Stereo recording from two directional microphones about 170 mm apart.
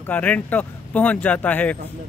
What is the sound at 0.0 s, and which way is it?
Speech, 10° left (ahead or behind).